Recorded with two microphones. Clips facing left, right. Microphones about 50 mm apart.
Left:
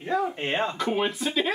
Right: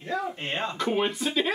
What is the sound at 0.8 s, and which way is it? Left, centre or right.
Speech, centre.